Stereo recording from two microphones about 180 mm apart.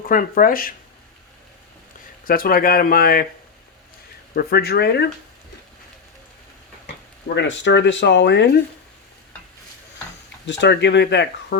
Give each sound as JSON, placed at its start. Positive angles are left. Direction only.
{"t": 0.0, "sound": "speech", "side_deg": 50}
{"t": 2.2, "sound": "speech", "side_deg": 55}
{"t": 4.4, "sound": "speech", "side_deg": 60}
{"t": 7.3, "sound": "speech", "side_deg": 85}
{"t": 10.4, "sound": "speech", "side_deg": 75}